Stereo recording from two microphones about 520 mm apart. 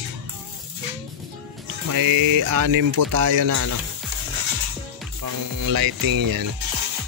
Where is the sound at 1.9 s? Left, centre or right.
Right.